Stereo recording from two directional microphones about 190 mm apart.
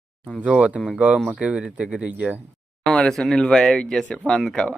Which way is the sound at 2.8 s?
5° left (ahead or behind).